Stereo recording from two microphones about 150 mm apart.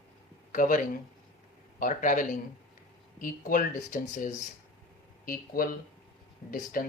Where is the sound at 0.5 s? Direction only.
65° left (ahead or behind).